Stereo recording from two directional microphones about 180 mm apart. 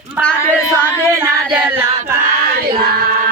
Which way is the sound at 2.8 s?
55° right (ahead or behind).